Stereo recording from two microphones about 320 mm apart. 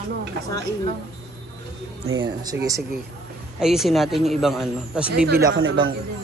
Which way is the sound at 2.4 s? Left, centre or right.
Centre.